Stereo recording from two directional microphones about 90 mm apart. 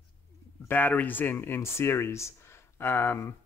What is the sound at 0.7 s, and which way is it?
Speech, 20° left (ahead or behind).